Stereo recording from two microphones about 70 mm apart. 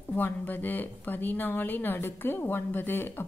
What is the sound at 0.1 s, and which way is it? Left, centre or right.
A woman's voice, left.